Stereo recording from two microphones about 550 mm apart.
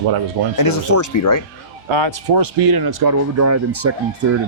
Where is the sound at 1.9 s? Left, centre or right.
Right.